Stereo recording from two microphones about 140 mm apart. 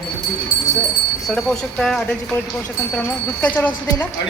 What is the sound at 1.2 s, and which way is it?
A woman's voice, centre (ahead or behind).